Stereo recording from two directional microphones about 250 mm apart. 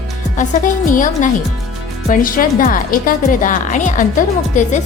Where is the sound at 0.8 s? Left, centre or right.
Left.